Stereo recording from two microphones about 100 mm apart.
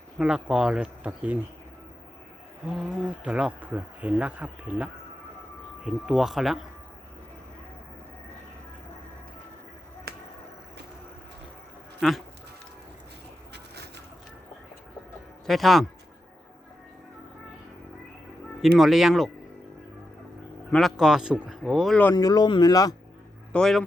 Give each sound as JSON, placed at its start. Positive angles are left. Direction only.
{"t": 0.2, "sound": "speech", "side_deg": -10}
{"t": 2.6, "sound": "speech", "side_deg": -10}
{"t": 11.9, "sound": "speech", "side_deg": 0}
{"t": 15.4, "sound": "speech", "side_deg": 0}
{"t": 18.6, "sound": "speech", "side_deg": 0}
{"t": 20.9, "sound": "speech", "side_deg": -5}
{"t": 22.1, "sound": "speech", "side_deg": 40}
{"t": 23.5, "sound": "a man's voice", "side_deg": 5}